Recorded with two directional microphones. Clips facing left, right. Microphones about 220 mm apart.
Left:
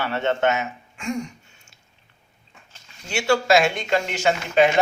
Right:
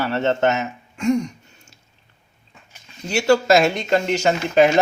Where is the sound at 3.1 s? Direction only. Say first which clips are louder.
Right 3 dB; 40° right (ahead or behind).